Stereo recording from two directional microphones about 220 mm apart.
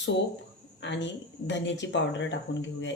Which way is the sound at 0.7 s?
55° left (ahead or behind).